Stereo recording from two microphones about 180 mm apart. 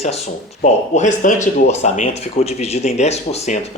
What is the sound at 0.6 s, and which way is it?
Speech, 40° left (ahead or behind).